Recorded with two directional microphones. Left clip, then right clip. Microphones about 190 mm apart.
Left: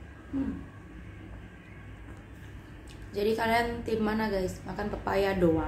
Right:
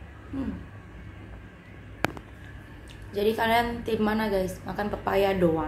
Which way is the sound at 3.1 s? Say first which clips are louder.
Right 3 dB; 5° right (ahead or behind).